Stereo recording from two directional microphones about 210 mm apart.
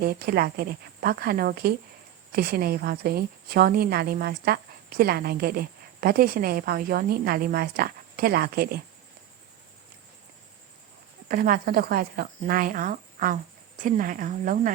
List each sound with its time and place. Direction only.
0.0 s a woman's voice: 45° right (ahead or behind)
11.3 s a woman's voice: 40° right (ahead or behind)